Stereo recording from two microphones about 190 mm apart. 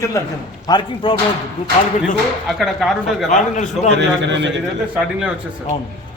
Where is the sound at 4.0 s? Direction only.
70° right (ahead or behind).